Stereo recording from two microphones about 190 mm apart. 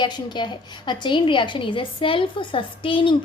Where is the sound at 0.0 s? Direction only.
25° left (ahead or behind).